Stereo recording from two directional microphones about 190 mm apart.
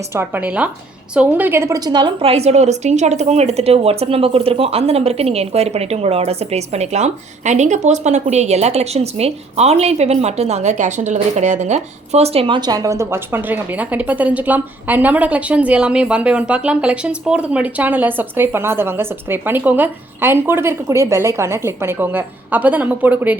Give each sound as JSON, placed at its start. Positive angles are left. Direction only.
{"t": 0.1, "sound": "a woman's voice", "side_deg": -10}